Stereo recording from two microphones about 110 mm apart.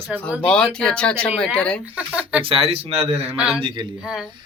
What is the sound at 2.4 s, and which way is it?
Speech, 60° right (ahead or behind).